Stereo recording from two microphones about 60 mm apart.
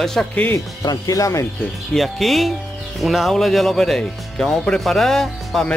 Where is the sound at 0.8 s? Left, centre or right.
Left.